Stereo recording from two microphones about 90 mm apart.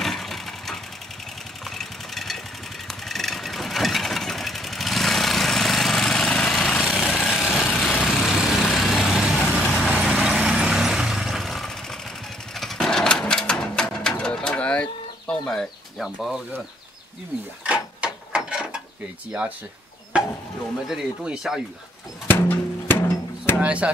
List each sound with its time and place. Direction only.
0.0 s vehicle: centre (ahead or behind)
7.2 s vehicle: centre (ahead or behind)
12.5 s sewing machine: 5° left (ahead or behind)
17.6 s mechanisms: 15° right (ahead or behind)
20.1 s stir: 10° right (ahead or behind)
20.9 s speech: 5° right (ahead or behind)
22.3 s bird: 25° left (ahead or behind)
23.6 s speech: 15° right (ahead or behind)